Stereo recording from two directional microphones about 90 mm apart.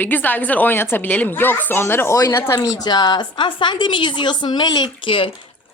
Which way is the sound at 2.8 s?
50° left (ahead or behind).